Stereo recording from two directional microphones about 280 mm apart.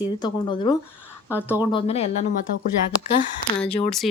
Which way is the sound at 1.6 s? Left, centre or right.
Centre.